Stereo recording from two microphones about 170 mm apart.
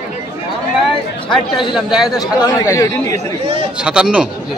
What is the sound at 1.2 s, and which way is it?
Speech, 30° left (ahead or behind).